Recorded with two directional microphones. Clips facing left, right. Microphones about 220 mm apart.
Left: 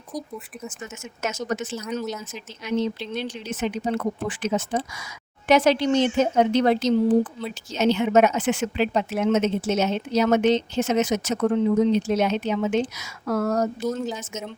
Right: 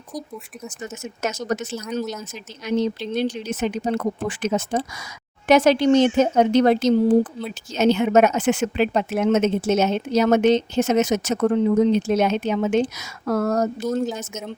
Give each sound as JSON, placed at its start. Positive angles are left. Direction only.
{"t": 1.0, "sound": "speech", "side_deg": -35}
{"t": 1.7, "sound": "speech", "side_deg": 5}
{"t": 2.6, "sound": "a woman's voice", "side_deg": -40}